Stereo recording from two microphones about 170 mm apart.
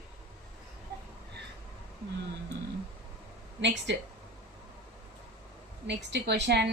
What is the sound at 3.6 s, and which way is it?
Speech, 90° right.